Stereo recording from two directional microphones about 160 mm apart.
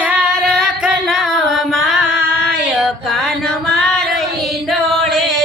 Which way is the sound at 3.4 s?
Centre (ahead or behind).